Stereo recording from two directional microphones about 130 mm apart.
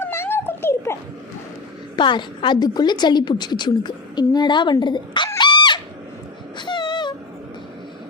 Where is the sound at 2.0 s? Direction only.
35° left (ahead or behind).